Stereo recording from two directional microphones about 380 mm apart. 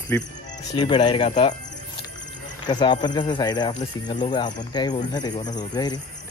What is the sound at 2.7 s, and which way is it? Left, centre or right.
Speech, centre.